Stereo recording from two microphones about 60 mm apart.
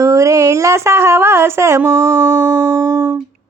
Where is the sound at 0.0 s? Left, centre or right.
Right.